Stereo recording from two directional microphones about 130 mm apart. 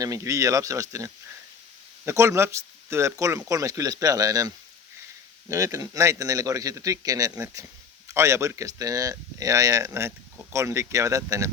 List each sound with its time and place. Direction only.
0.0 s speech: 25° right (ahead or behind)